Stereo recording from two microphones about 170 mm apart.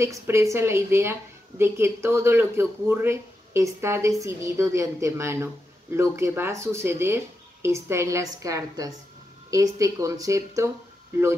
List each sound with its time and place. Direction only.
0.0 s a woman's voice: 15° right (ahead or behind)